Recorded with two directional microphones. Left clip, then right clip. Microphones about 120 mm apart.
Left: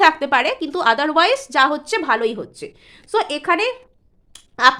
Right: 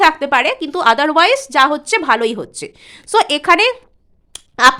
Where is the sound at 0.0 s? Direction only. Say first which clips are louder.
Right 2 dB; 15° right (ahead or behind).